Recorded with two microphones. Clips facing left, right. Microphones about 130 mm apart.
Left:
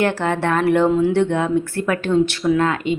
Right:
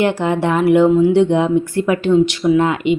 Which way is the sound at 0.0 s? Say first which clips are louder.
Right 3 dB; 15° right (ahead or behind).